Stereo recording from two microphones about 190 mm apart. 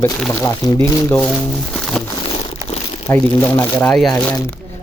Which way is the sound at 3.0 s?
10° left (ahead or behind).